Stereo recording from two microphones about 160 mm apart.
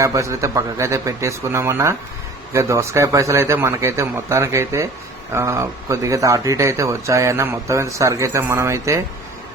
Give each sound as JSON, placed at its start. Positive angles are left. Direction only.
{"t": 0.0, "sound": "a man's voice", "side_deg": -20}